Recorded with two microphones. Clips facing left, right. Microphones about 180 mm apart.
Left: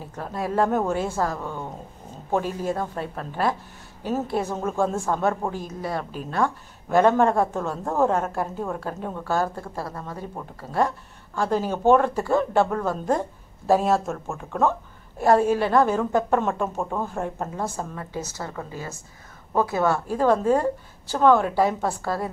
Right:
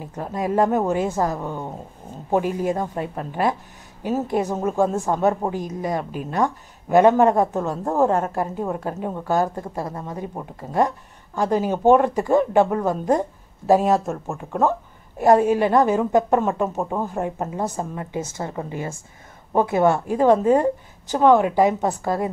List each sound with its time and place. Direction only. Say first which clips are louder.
0.0 s a woman's voice: right 3 dB; 15° right (ahead or behind)
17.6 s a woman's voice: right 4 dB; 20° right (ahead or behind)